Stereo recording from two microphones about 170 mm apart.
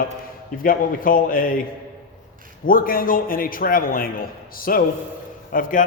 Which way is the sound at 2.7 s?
55° left (ahead or behind).